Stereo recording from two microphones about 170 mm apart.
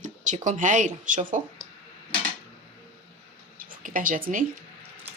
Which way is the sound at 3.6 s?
55° right (ahead or behind).